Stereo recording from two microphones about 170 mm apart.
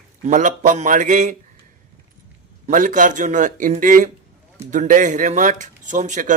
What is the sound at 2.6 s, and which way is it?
A man's voice, 50° right (ahead or behind).